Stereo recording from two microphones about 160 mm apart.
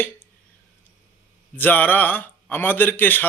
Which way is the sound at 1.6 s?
10° left (ahead or behind).